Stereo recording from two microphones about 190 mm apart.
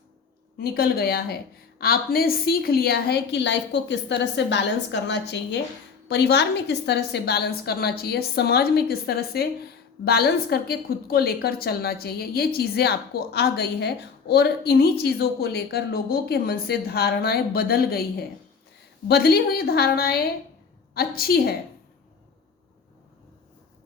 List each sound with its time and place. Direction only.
0.6 s a woman's voice: 55° left (ahead or behind)